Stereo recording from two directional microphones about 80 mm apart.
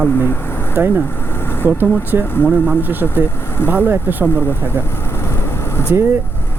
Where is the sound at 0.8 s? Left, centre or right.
Right.